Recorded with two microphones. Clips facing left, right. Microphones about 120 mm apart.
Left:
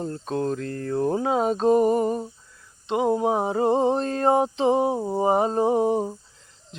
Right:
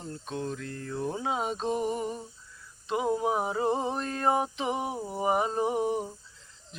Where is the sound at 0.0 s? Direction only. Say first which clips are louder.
Left 9 dB; 45° left (ahead or behind).